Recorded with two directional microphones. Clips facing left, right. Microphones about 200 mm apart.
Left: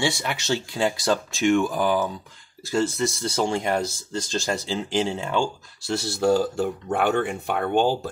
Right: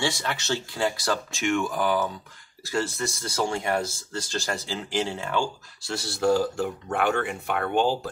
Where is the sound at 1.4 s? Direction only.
30° left (ahead or behind); by 5.4 s 15° left (ahead or behind).